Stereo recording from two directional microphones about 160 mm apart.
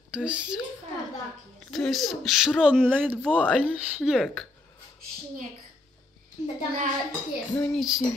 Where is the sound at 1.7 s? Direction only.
Centre (ahead or behind).